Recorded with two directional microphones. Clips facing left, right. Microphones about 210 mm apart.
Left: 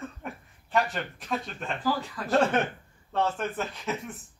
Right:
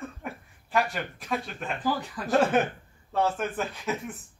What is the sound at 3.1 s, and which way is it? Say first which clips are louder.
Speech: right 1 dB; 5° right (ahead or behind).